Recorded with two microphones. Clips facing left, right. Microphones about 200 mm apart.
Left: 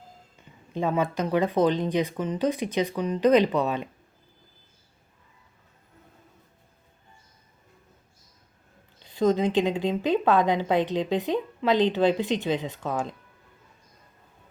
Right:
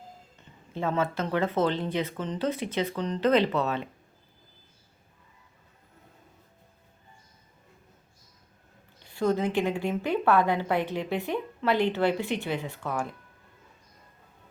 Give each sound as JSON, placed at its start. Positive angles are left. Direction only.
{"t": 0.7, "sound": "a woman's voice", "side_deg": 15}
{"t": 9.0, "sound": "a woman's voice", "side_deg": 20}